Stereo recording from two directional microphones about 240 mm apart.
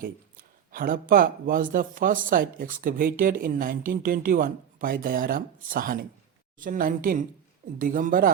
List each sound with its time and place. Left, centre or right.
0.0 s speech: right